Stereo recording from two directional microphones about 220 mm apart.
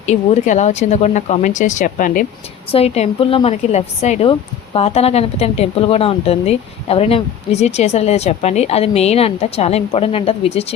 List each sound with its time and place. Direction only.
0.0 s a woman's voice: 30° left (ahead or behind)